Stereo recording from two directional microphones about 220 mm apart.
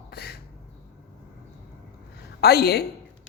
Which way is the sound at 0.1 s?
45° left (ahead or behind).